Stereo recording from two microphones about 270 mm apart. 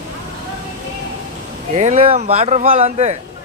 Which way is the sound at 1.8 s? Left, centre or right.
Right.